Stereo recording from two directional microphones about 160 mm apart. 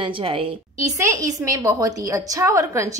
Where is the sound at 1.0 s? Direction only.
20° right (ahead or behind).